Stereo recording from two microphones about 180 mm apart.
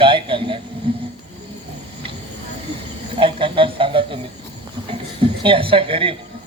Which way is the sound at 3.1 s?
30° right (ahead or behind).